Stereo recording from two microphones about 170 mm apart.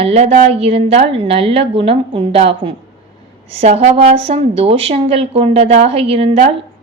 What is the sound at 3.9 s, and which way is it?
A woman's voice, 35° right (ahead or behind).